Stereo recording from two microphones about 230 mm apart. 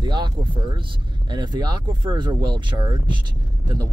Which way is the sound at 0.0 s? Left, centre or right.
Centre.